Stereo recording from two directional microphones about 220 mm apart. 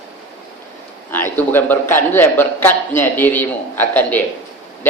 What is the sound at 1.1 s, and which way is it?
A man's voice, 10° left (ahead or behind).